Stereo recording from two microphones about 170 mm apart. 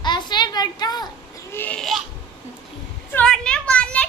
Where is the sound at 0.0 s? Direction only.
25° left (ahead or behind).